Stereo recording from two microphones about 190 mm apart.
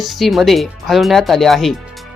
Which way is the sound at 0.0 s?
Centre (ahead or behind).